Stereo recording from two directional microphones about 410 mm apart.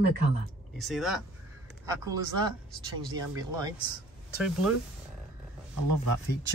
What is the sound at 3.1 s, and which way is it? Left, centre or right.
Speech, centre.